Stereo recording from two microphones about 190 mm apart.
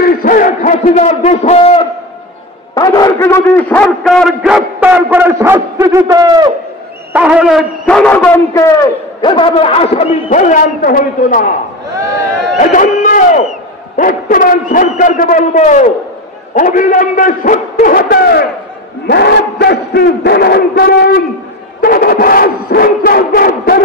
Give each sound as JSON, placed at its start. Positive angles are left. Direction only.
{"t": 0.0, "sound": "a sound", "side_deg": 50}
{"t": 2.7, "sound": "a man's voice", "side_deg": 20}
{"t": 7.1, "sound": "a man's voice", "side_deg": -5}
{"t": 10.3, "sound": "a man's voice", "side_deg": 45}
{"t": 12.5, "sound": "a man's voice", "side_deg": 45}